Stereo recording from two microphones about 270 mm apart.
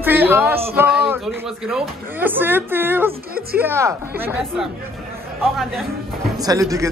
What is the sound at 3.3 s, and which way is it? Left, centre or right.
Speech, right.